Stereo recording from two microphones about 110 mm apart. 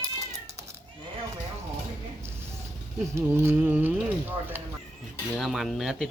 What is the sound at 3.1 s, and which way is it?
Speech, 20° right (ahead or behind).